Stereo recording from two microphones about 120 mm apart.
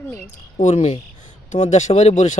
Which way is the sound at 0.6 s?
65° left (ahead or behind).